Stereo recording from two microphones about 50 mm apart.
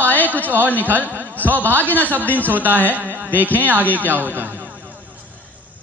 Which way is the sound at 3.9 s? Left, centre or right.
Right.